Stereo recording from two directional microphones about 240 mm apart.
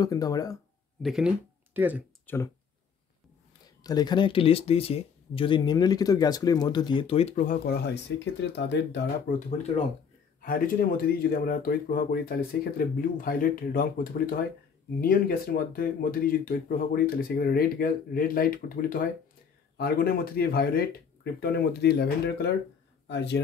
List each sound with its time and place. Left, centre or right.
0.0 s speech: centre
1.0 s speech: centre
2.2 s speech: centre
3.8 s speech: centre; by 9.0 s left
10.4 s a man's voice: left